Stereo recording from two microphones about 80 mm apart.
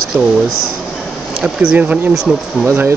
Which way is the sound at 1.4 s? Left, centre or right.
Centre.